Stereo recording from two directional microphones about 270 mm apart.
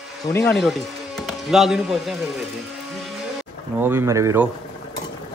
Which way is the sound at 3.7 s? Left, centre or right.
Centre.